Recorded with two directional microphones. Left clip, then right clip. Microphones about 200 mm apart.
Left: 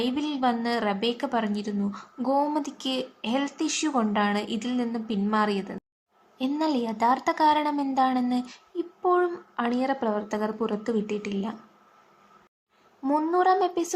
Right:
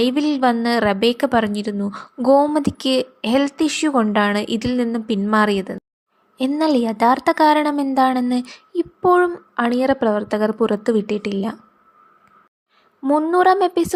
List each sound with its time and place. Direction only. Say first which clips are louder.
0.0 s a woman's voice: right 9 dB; 30° right (ahead or behind)
13.0 s speech: right 8 dB; 30° right (ahead or behind)